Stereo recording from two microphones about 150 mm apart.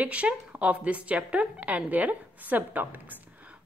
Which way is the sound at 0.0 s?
10° right (ahead or behind).